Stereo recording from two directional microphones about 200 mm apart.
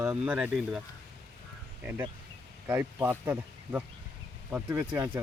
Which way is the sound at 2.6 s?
10° right (ahead or behind).